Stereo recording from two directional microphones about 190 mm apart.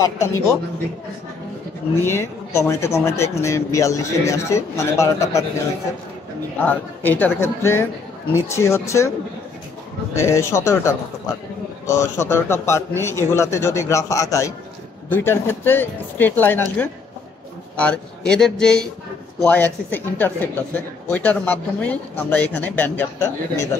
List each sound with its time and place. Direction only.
0.0 s speech: 15° left (ahead or behind)
2.0 s speech: 15° left (ahead or behind)
6.6 s speech: 10° left (ahead or behind)
10.1 s speech: 15° left (ahead or behind)
17.7 s speech: 5° left (ahead or behind)